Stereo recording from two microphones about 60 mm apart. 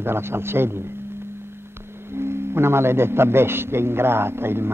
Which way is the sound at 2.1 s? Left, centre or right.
Right.